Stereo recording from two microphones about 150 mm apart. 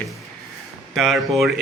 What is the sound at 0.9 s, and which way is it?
Speech, centre (ahead or behind).